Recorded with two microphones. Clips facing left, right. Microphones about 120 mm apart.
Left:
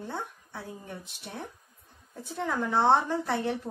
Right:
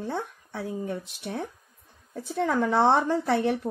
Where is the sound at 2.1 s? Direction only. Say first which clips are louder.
Right 6 dB; 75° right (ahead or behind).